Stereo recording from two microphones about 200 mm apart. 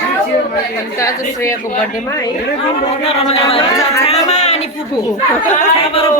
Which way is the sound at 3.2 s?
30° left (ahead or behind).